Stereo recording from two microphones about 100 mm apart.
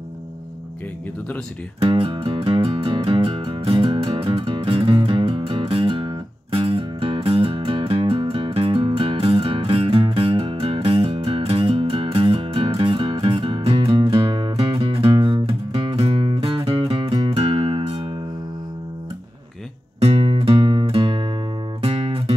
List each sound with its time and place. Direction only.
1.8 s music: 65° right (ahead or behind)
20.0 s music: 75° right (ahead or behind); by 21.3 s 55° right (ahead or behind)
21.8 s music: 70° right (ahead or behind)